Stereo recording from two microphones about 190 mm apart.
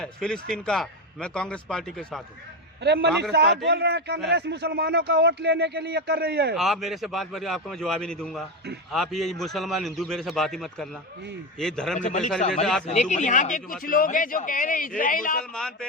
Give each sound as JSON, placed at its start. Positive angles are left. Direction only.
{"t": 0.0, "sound": "a man's voice", "side_deg": 5}
{"t": 2.8, "sound": "speech", "side_deg": -60}
{"t": 6.6, "sound": "a man's voice", "side_deg": 0}
{"t": 11.9, "sound": "a man's voice", "side_deg": 40}
{"t": 15.5, "sound": "a man's voice", "side_deg": 5}